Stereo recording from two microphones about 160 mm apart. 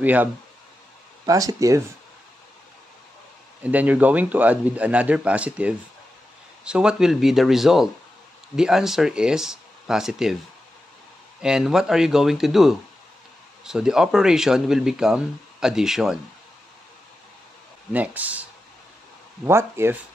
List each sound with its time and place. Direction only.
0.0 s a man's voice: 10° right (ahead or behind)
1.2 s speech: 20° right (ahead or behind)
3.6 s a man's voice: 10° right (ahead or behind)
11.4 s speech: 5° right (ahead or behind)
17.9 s a man's voice: 10° right (ahead or behind)